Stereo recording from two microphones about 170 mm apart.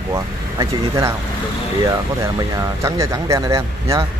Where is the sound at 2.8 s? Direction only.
20° right (ahead or behind).